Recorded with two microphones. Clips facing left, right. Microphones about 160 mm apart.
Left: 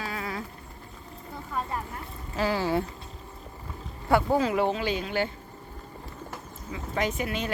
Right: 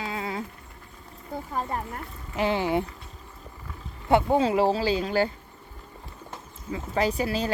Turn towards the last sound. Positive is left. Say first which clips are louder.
# right 4 dB
turn(degrees=-35)  # may be behind; listen again after turning